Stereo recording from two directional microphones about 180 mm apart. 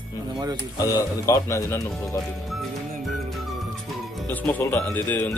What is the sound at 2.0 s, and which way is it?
Music, centre (ahead or behind).